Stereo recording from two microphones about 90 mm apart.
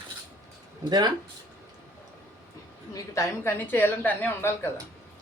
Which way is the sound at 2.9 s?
35° left (ahead or behind).